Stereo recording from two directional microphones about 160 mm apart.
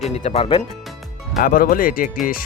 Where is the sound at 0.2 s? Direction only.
40° left (ahead or behind).